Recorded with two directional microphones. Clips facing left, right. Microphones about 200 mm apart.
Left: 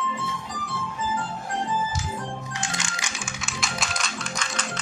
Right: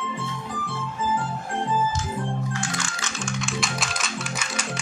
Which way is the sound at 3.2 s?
Centre (ahead or behind).